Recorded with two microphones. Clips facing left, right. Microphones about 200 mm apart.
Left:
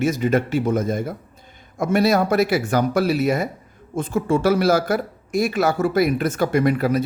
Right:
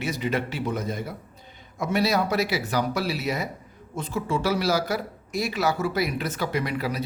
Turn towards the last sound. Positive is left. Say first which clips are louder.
# left 9 dB
turn(degrees=50)  # may be behind; listen again after turning